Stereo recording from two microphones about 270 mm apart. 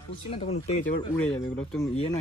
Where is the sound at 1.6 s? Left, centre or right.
Centre.